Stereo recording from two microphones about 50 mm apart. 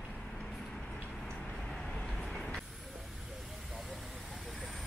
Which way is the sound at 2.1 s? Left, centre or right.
Centre.